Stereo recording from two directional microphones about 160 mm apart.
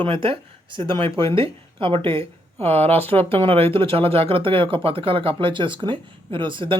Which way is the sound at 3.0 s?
15° left (ahead or behind).